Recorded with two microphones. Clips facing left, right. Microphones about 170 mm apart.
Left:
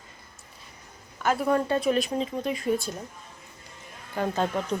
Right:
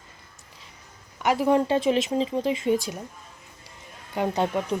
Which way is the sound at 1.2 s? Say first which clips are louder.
Right 3 dB; 15° right (ahead or behind).